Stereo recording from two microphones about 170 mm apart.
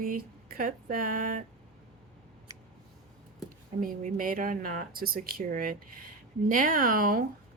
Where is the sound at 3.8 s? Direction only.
55° right (ahead or behind).